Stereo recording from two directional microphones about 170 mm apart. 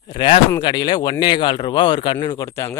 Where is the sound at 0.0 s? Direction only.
30° left (ahead or behind).